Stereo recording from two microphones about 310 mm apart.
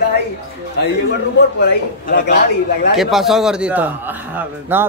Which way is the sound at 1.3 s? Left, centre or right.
Left.